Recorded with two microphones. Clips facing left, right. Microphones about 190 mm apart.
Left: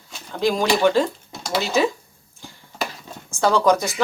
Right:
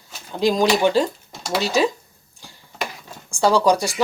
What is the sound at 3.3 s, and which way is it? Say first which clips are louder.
Speech: right 1 dB; 15° right (ahead or behind).